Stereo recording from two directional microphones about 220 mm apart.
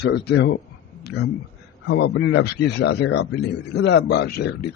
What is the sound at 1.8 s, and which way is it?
A man's voice, 55° left (ahead or behind).